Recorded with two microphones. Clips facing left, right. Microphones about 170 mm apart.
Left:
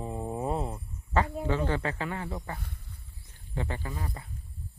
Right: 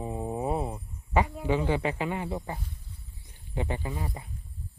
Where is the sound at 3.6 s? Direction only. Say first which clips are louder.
Right 3 dB; 15° right (ahead or behind).